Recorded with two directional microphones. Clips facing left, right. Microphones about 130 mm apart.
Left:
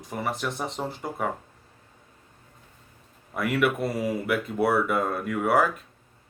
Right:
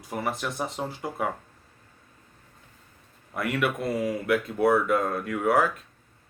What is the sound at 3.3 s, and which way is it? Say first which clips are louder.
Speech: left 3 dB; centre (ahead or behind).